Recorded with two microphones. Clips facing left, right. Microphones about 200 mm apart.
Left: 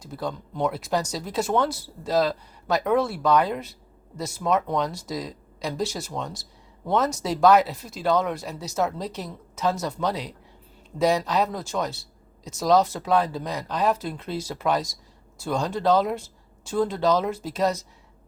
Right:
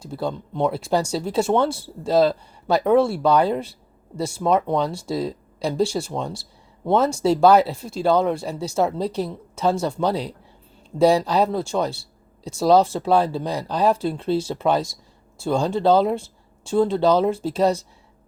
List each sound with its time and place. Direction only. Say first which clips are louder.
0.0 s speech: right 4 dB; 30° right (ahead or behind)